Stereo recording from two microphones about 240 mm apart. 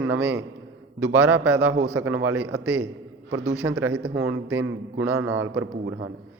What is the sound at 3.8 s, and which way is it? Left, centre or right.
Speech, right.